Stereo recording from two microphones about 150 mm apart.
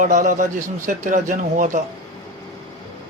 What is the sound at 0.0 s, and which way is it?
Speech, 60° right (ahead or behind).